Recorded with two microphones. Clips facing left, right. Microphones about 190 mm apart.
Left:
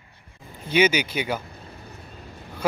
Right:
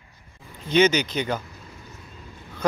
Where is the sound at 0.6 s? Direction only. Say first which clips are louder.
Right 1 dB; 10° left (ahead or behind).